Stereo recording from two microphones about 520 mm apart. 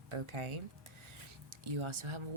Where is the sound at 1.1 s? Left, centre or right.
Right.